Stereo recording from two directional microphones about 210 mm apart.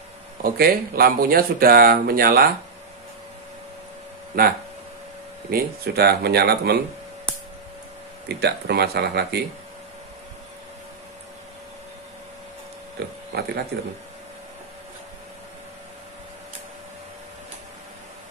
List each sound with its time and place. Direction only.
0.4 s speech: 45° right (ahead or behind)
5.5 s speech: 50° right (ahead or behind)
8.3 s speech: 50° right (ahead or behind)
13.3 s speech: 50° right (ahead or behind)